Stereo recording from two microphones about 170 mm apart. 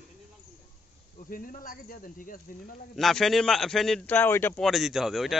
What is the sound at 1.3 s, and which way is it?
Speech, 55° left (ahead or behind).